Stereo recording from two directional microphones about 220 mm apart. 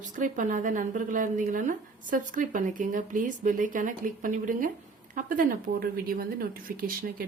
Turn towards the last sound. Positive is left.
turn(degrees=-40)  # may be behind; listen again after turning